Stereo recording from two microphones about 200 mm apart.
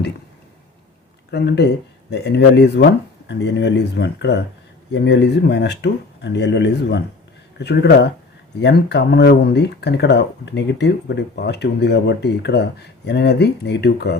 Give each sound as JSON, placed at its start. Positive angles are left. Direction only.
{"t": 1.3, "sound": "speech", "side_deg": 55}